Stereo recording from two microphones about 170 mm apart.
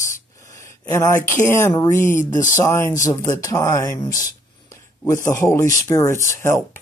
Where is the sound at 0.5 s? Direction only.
15° left (ahead or behind).